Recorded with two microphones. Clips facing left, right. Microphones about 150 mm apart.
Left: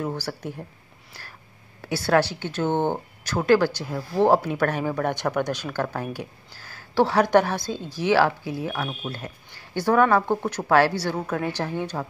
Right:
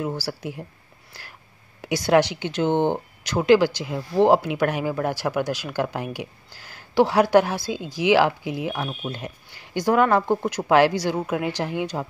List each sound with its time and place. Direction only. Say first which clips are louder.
0.0 s speech: right 1 dB; 10° right (ahead or behind)
1.8 s speech: right 2 dB; 15° right (ahead or behind)